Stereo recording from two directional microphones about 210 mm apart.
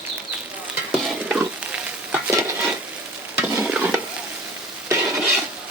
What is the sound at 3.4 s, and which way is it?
Stir, 10° right (ahead or behind).